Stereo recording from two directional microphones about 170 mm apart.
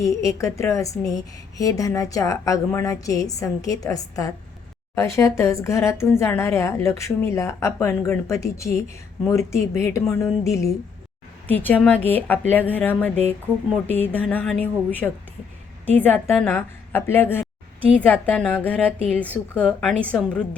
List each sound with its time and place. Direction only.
0.0 s a woman's voice: 20° left (ahead or behind)